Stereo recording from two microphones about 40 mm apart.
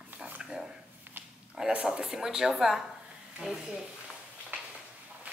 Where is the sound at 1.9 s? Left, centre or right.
Centre.